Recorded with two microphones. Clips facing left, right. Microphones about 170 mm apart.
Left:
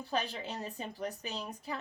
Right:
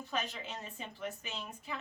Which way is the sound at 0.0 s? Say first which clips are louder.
Left 3 dB; 35° left (ahead or behind).